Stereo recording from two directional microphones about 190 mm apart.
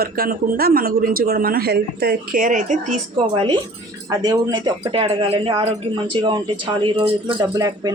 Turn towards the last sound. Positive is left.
turn(degrees=-20)  # may be behind; listen again after turning